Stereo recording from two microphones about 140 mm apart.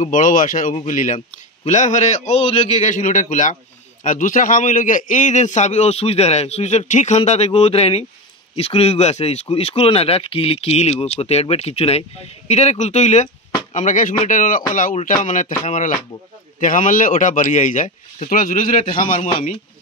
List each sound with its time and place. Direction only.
0.0 s a man's voice: 65° left (ahead or behind)